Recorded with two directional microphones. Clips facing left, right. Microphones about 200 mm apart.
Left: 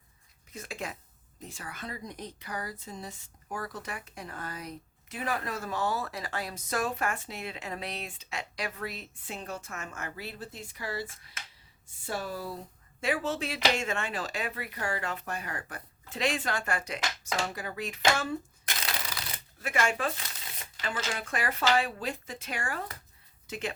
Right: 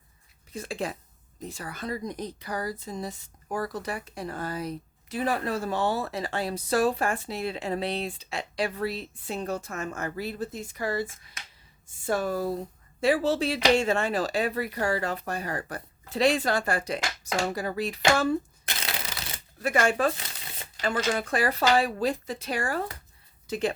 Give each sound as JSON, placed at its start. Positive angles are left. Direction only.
{"t": 0.5, "sound": "speech", "side_deg": -30}
{"t": 12.0, "sound": "speech", "side_deg": -50}
{"t": 13.0, "sound": "speech", "side_deg": -35}
{"t": 18.8, "sound": "crushing", "side_deg": -25}
{"t": 19.6, "sound": "speech", "side_deg": -40}